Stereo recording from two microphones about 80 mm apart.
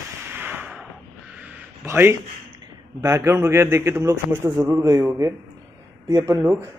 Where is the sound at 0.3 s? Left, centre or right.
Right.